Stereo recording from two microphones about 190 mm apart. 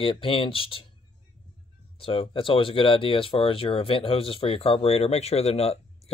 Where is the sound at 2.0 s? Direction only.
30° left (ahead or behind).